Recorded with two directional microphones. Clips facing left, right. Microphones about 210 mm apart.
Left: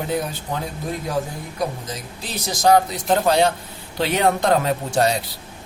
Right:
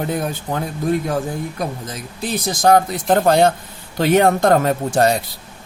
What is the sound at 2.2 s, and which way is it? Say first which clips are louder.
Speech: right 3 dB; 55° right (ahead or behind).